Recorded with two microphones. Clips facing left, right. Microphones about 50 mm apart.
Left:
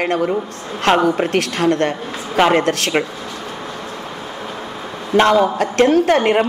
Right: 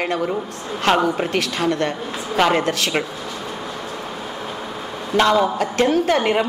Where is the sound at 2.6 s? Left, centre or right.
Left.